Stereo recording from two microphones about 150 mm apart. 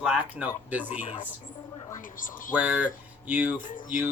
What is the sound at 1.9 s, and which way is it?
Speech, 65° left (ahead or behind).